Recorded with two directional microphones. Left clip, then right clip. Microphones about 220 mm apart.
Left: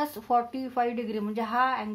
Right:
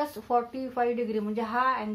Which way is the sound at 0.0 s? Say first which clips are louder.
Left 1 dB; 40° left (ahead or behind).